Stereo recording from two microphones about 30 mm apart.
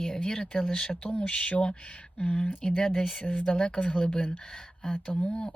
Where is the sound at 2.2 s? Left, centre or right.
Left.